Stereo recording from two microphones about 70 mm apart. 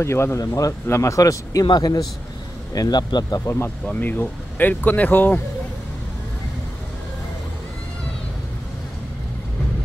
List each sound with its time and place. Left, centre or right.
0.0 s a man's voice: left
3.4 s speech: left
3.8 s speech: left